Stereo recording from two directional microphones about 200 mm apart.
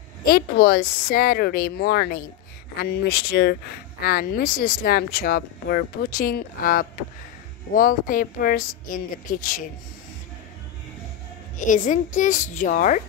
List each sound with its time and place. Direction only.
0.2 s speech: 50° left (ahead or behind)
11.5 s a woman's voice: 40° left (ahead or behind)